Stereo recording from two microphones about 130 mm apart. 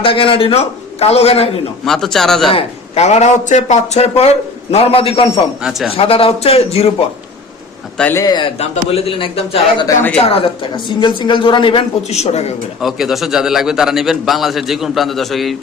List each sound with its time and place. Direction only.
0.0 s a man's voice: 45° left (ahead or behind)
1.8 s a man's voice: 5° left (ahead or behind)
2.5 s a man's voice: 50° left (ahead or behind)
8.1 s a man's voice: 30° left (ahead or behind)
8.5 s a man's voice: 55° left (ahead or behind)
12.8 s a man's voice: centre (ahead or behind)